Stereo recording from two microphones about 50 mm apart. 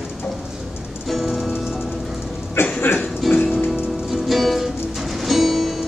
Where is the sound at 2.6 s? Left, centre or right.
Left.